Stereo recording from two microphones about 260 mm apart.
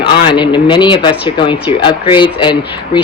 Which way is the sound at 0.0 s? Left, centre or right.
Centre.